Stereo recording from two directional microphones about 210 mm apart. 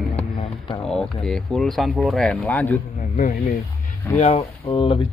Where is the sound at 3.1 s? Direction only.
35° left (ahead or behind); by 5.1 s 20° left (ahead or behind).